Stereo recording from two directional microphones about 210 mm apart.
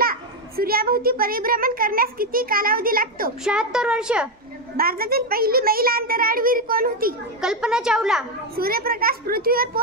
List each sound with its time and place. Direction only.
0.0 s a child's voice: 45° right (ahead or behind)
3.4 s a woman's voice: 5° right (ahead or behind)
4.7 s a child's voice: 45° right (ahead or behind)
7.4 s a woman's voice: 5° right (ahead or behind)
8.5 s a child's voice: 45° right (ahead or behind)